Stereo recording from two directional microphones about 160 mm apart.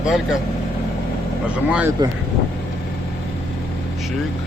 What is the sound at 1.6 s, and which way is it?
Speech, 10° right (ahead or behind).